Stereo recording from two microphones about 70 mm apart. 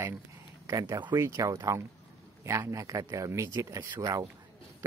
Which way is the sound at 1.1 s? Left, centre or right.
Right.